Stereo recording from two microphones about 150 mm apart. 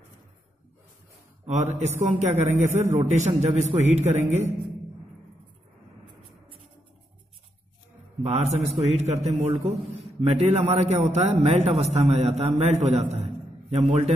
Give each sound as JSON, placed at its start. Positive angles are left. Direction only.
{"t": 1.4, "sound": "a man's voice", "side_deg": -50}
{"t": 8.2, "sound": "a man's voice", "side_deg": -45}